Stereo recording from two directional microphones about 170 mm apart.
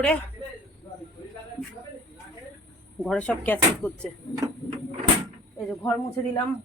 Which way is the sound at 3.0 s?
5° left (ahead or behind).